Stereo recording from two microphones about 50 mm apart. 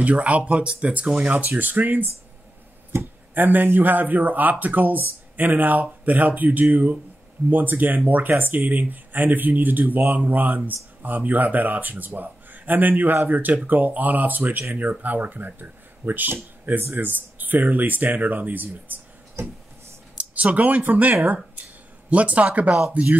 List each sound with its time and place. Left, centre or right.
0.0 s speech: right
19.4 s a sound: right
20.2 s speech: right